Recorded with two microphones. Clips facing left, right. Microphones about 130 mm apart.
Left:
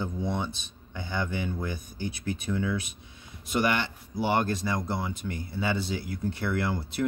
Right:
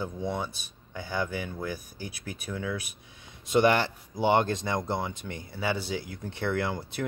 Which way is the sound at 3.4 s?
20° right (ahead or behind).